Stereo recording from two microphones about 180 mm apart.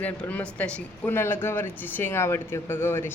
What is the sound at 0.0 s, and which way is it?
Speech, 10° left (ahead or behind).